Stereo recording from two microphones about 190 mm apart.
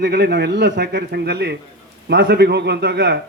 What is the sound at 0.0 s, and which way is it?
A man's voice, 60° right (ahead or behind).